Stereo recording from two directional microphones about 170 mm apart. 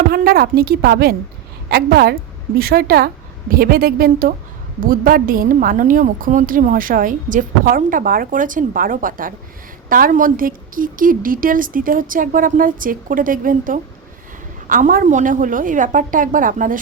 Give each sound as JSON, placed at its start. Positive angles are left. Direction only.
{"t": 0.1, "sound": "a woman's voice", "side_deg": -60}